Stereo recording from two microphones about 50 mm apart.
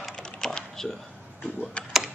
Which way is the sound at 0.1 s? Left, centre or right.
Centre.